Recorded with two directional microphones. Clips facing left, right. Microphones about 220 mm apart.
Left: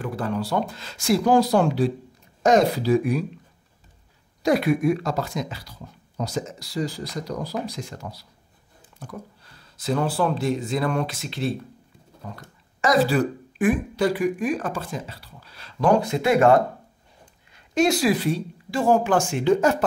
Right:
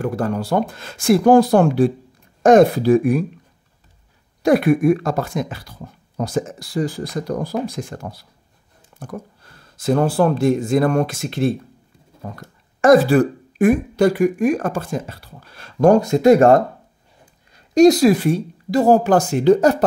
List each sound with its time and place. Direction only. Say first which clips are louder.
0.0 s speech: right 5 dB; 45° right (ahead or behind)
4.4 s speech: right 6 dB; 50° right (ahead or behind)
12.8 s speech: right 8 dB; 50° right (ahead or behind); by 19.8 s 35° right (ahead or behind)